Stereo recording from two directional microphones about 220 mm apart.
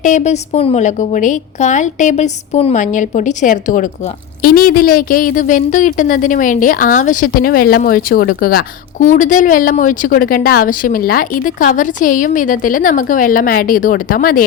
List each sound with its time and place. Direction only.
0.0 s a woman's voice: 35° left (ahead or behind)